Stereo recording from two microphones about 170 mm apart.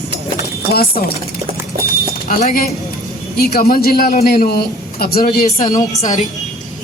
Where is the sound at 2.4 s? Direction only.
55° left (ahead or behind).